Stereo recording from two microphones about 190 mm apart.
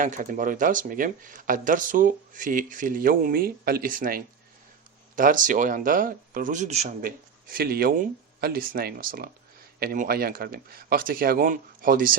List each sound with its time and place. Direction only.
0.0 s speech: 45° right (ahead or behind)
7.5 s speech: 50° right (ahead or behind)